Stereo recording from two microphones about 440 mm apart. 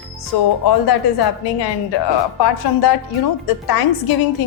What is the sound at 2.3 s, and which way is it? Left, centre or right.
A woman's voice, left.